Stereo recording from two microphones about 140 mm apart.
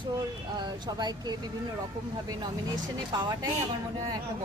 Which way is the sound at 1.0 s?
30° right (ahead or behind).